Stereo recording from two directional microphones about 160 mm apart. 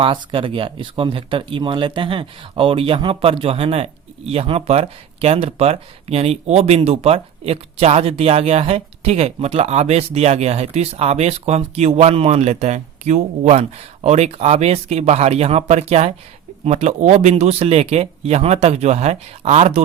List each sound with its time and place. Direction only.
0.0 s speech: 30° right (ahead or behind)